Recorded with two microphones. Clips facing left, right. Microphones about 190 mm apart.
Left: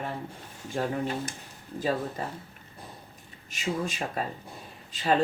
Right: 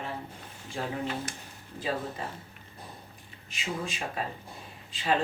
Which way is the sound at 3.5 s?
45° left (ahead or behind).